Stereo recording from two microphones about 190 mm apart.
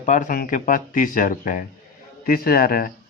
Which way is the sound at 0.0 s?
40° left (ahead or behind).